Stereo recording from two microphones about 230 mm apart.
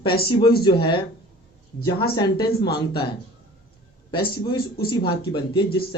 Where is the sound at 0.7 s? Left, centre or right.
Left.